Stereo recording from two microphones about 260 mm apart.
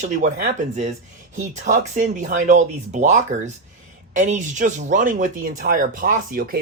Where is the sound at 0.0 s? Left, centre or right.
Right.